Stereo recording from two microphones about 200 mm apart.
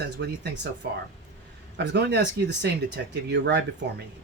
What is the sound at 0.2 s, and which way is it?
Speech, 55° right (ahead or behind).